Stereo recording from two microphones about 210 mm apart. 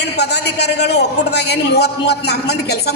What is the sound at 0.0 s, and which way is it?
A man's voice, 55° left (ahead or behind).